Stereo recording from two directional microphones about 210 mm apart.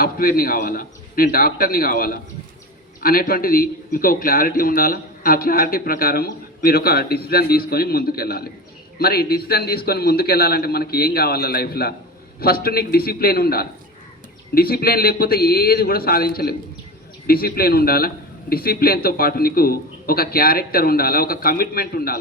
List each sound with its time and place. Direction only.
0.0 s a man's voice: 45° left (ahead or behind)